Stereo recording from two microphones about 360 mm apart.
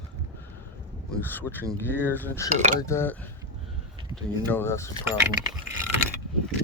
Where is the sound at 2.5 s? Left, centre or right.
Centre.